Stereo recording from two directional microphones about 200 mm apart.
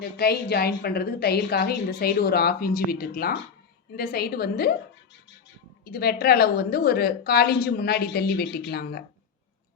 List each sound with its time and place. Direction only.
0.0 s a woman's voice: 50° left (ahead or behind)
5.8 s a woman's voice: 50° left (ahead or behind)